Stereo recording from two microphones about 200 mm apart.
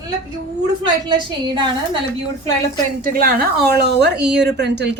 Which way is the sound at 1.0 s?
25° right (ahead or behind).